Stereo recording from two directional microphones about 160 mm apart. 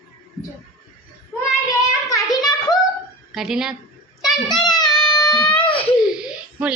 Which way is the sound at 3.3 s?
5° right (ahead or behind).